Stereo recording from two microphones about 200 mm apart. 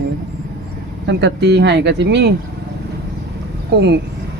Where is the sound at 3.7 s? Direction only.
60° right (ahead or behind).